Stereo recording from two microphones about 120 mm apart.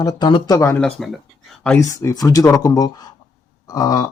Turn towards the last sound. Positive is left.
turn(degrees=30)  # may be behind; listen again after turning